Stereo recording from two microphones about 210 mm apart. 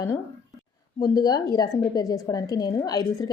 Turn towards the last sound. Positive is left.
turn(degrees=15)  # may be behind; listen again after turning